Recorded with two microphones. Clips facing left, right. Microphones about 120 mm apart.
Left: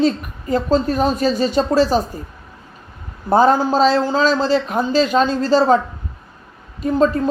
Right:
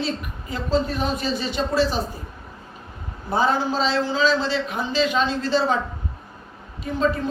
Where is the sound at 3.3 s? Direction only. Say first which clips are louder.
Left 8 dB; 45° left (ahead or behind).